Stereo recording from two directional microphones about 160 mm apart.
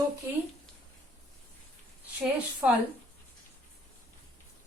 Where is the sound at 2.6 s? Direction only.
5° right (ahead or behind).